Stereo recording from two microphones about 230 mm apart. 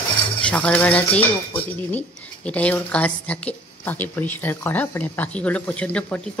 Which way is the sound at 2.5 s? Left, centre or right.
Centre.